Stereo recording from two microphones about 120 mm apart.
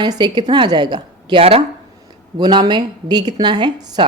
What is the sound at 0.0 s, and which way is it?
A woman's voice, 35° right (ahead or behind).